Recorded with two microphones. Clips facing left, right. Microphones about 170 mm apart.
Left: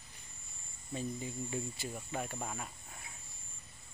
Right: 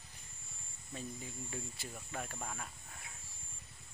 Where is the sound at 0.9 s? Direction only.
5° left (ahead or behind).